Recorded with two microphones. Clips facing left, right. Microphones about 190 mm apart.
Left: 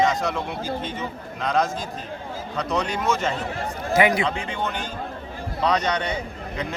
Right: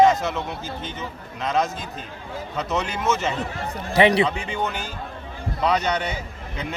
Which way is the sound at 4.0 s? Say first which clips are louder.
Right 3 dB; 35° right (ahead or behind).